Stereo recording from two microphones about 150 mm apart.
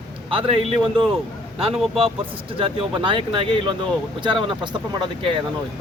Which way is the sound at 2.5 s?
35° right (ahead or behind).